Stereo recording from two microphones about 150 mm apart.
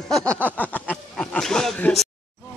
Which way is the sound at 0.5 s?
10° left (ahead or behind).